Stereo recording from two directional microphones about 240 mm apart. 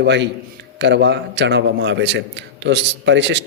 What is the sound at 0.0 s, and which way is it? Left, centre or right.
A man's voice, right.